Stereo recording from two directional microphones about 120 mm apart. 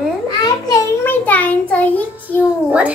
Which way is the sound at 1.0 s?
15° left (ahead or behind).